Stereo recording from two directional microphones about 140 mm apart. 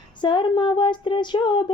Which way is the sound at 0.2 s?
35° left (ahead or behind).